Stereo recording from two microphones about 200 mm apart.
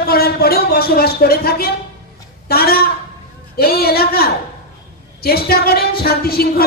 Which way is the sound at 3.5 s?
50° left (ahead or behind).